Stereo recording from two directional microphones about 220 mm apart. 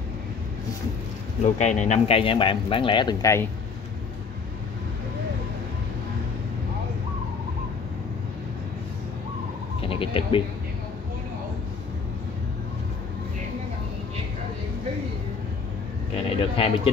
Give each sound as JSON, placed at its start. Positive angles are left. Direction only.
{"t": 1.4, "sound": "speech", "side_deg": 30}
{"t": 9.8, "sound": "a sound", "side_deg": 25}
{"t": 16.3, "sound": "speech", "side_deg": 25}